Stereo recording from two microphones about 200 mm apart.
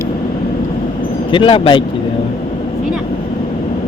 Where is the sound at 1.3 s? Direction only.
25° left (ahead or behind).